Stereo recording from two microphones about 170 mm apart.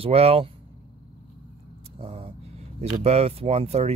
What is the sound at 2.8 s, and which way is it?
Speech, 40° right (ahead or behind).